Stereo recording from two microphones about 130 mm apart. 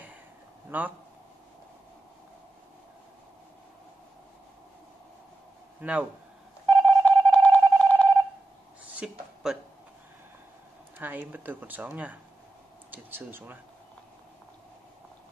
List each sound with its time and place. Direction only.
0.7 s speech: 15° right (ahead or behind)
5.8 s speech: 10° right (ahead or behind)
6.7 s telephone dialing: 10° left (ahead or behind)
8.9 s speech: 5° right (ahead or behind)
11.0 s speech: 15° right (ahead or behind)